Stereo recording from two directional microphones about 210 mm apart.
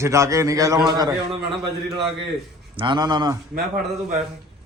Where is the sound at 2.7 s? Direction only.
20° right (ahead or behind).